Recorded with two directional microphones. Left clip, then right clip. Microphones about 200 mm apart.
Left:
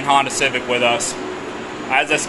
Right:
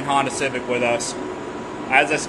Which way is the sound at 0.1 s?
5° left (ahead or behind).